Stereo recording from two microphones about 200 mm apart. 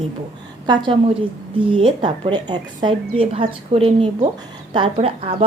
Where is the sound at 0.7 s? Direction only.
25° right (ahead or behind).